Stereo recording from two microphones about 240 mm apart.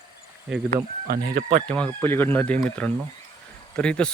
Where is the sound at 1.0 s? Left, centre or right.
Right.